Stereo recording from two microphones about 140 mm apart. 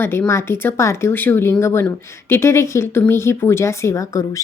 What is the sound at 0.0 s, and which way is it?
A woman's voice, 15° left (ahead or behind).